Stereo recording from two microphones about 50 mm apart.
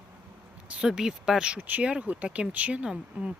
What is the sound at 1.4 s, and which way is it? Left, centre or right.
Speech, right.